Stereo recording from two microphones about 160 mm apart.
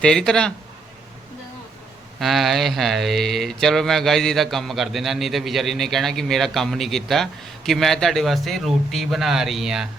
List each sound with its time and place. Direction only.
0.0 s speech: 5° left (ahead or behind)
2.1 s speech: centre (ahead or behind)